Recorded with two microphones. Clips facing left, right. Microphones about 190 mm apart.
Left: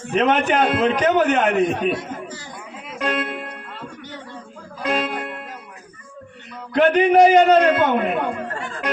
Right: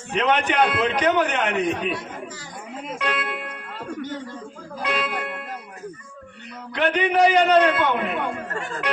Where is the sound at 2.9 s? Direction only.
35° left (ahead or behind).